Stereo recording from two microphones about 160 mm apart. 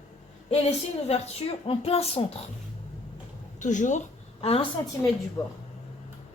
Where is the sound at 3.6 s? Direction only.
50° left (ahead or behind).